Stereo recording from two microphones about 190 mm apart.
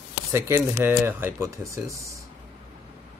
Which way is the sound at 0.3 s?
15° right (ahead or behind).